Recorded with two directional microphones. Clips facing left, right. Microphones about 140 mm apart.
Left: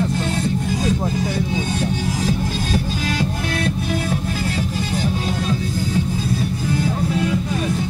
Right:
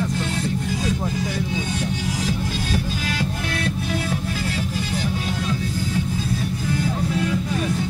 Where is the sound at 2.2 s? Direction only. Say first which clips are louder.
Left 3 dB; 30° left (ahead or behind).